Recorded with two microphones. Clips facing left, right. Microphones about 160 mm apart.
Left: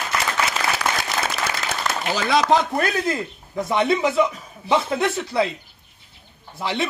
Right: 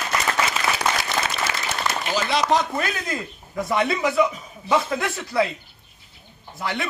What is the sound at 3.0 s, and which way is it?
A man's voice, 25° left (ahead or behind).